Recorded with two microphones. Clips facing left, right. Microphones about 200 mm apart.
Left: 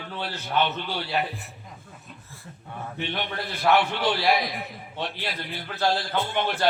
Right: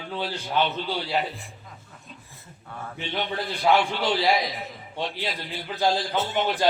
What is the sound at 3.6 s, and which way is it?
Speech, 55° left (ahead or behind).